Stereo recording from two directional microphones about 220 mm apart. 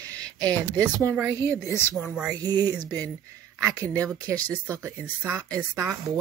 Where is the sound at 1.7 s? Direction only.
10° left (ahead or behind).